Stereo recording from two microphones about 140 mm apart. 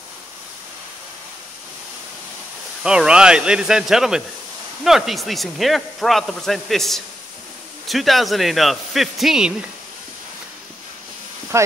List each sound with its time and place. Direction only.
2.8 s speech: 5° right (ahead or behind)
11.5 s speech: 20° right (ahead or behind)